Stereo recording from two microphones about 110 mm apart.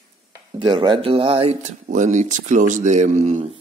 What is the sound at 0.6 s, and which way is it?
Speech, 50° right (ahead or behind).